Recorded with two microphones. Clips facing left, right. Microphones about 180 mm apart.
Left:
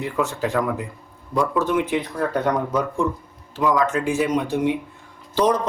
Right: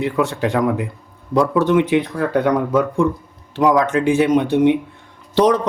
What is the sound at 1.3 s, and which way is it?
Speech, 85° right.